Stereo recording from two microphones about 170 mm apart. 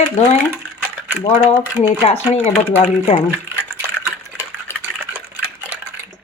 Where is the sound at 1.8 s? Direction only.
35° left (ahead or behind).